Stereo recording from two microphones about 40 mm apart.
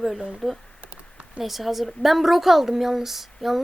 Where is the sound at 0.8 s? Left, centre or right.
Right.